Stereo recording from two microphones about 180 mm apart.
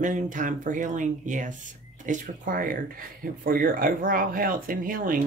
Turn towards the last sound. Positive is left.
turn(degrees=-50)  # may be behind; listen again after turning